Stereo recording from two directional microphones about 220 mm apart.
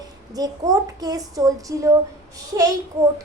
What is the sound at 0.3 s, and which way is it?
A woman's voice, 15° right (ahead or behind).